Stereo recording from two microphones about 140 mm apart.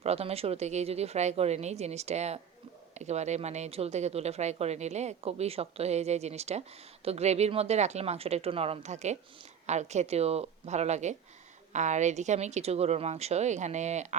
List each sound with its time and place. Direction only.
0.0 s speech: 45° right (ahead or behind)